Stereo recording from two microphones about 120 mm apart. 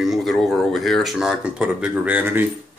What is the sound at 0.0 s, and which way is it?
Speech, centre (ahead or behind).